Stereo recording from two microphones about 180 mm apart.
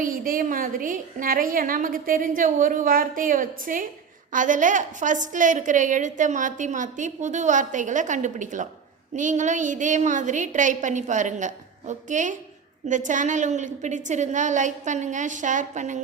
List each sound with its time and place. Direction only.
0.0 s a woman's voice: 50° right (ahead or behind)